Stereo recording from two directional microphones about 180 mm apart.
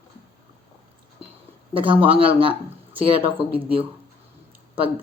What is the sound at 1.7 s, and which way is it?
Speech, 30° right (ahead or behind).